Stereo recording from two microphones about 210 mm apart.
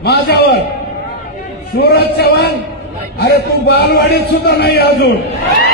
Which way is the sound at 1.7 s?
50° left (ahead or behind).